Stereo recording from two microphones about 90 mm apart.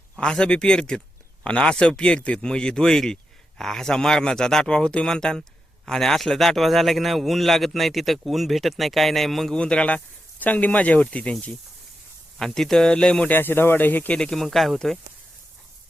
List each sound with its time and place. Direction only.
0.2 s a man's voice: 10° left (ahead or behind)
13.3 s speech: 25° left (ahead or behind)
14.2 s a man's voice: 5° left (ahead or behind)